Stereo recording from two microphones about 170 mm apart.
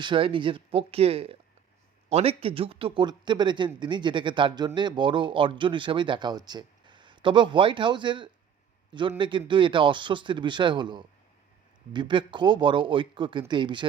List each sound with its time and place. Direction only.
0.0 s speech: 30° right (ahead or behind)